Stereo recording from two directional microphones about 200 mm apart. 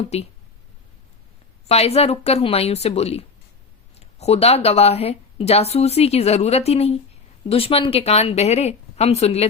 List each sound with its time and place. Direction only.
0.0 s speech: 30° left (ahead or behind)
1.6 s speech: 30° left (ahead or behind)